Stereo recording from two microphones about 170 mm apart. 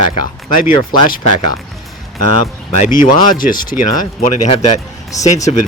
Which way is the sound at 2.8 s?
50° left (ahead or behind).